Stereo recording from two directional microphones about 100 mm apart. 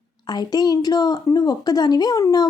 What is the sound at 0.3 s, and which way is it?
A woman's voice, 40° left (ahead or behind).